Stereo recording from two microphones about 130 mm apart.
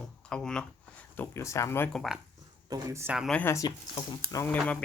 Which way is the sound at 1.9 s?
Centre (ahead or behind).